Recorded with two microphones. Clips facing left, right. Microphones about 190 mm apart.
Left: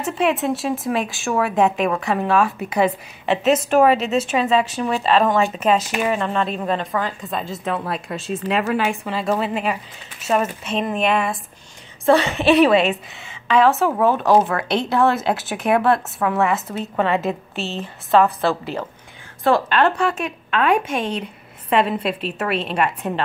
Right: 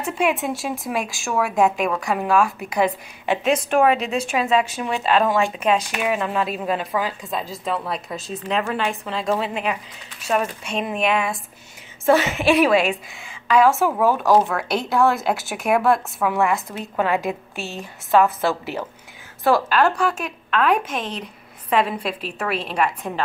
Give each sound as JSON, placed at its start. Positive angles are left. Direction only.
{"t": 0.0, "sound": "a woman's voice", "side_deg": 0}
{"t": 2.7, "sound": "a woman's voice", "side_deg": 5}
{"t": 17.6, "sound": "a woman's voice", "side_deg": 20}
{"t": 18.1, "sound": "a woman's voice", "side_deg": 0}